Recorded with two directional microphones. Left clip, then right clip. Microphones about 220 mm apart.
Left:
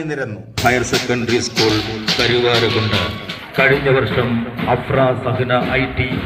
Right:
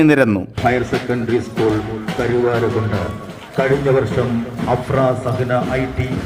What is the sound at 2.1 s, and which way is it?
A man's voice, 15° right (ahead or behind).